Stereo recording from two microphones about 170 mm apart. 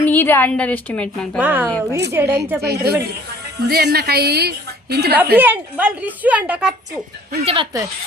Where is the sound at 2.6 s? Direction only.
70° right (ahead or behind).